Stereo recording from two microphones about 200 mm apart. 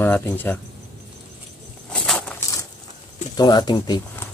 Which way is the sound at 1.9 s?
5° left (ahead or behind).